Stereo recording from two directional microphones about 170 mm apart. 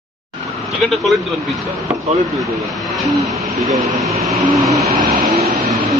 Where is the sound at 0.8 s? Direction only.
Centre (ahead or behind).